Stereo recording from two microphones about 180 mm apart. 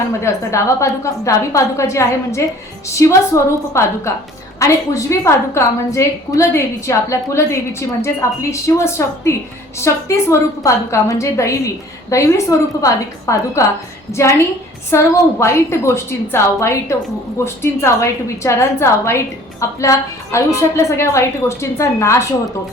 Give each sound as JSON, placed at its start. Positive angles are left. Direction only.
{"t": 0.2, "sound": "a woman's voice", "side_deg": 15}